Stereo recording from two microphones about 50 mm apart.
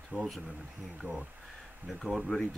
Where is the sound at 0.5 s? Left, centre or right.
Right.